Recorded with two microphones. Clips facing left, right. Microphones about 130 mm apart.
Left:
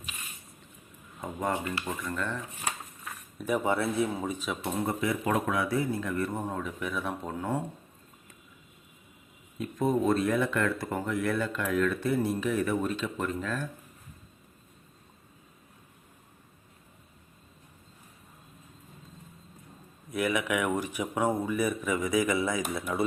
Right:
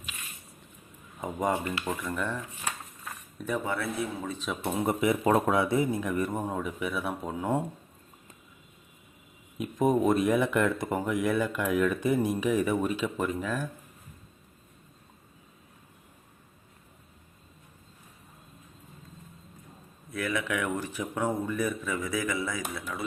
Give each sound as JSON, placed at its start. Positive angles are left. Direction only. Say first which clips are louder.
{"t": 1.2, "sound": "speech", "louder": "right 2 dB", "side_deg": -15}
{"t": 3.0, "sound": "a sound", "louder": "even", "side_deg": 5}
{"t": 3.6, "sound": "a man's voice", "louder": "left 6 dB", "side_deg": 20}
{"t": 4.6, "sound": "speech", "louder": "right 4 dB", "side_deg": -15}
{"t": 5.2, "sound": "speech", "louder": "right 5 dB", "side_deg": -30}
{"t": 9.6, "sound": "speech", "louder": "right 2 dB", "side_deg": -15}
{"t": 20.1, "sound": "speech", "louder": "left 3 dB", "side_deg": 15}